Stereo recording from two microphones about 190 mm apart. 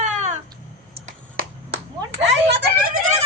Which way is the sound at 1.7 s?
80° right.